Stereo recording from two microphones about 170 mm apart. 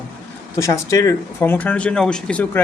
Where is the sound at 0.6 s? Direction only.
20° left (ahead or behind).